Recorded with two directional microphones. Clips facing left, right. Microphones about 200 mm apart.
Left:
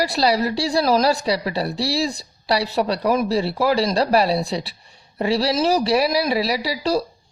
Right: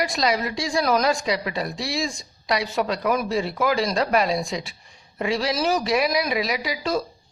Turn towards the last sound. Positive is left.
turn(degrees=35)  # may be behind; listen again after turning